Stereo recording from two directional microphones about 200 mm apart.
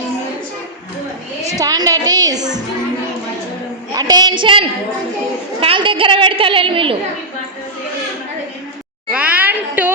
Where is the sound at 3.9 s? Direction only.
20° right (ahead or behind).